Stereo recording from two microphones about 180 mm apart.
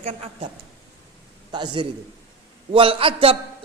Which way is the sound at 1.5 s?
25° right (ahead or behind).